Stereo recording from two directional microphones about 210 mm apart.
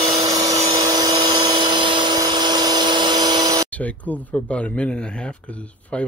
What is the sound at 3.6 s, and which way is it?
Speech, 5° left (ahead or behind).